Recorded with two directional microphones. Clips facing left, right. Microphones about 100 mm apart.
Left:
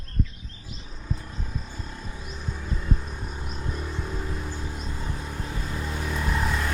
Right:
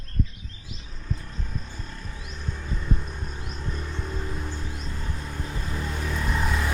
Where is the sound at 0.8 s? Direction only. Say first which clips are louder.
Left 1 dB; 10° left (ahead or behind).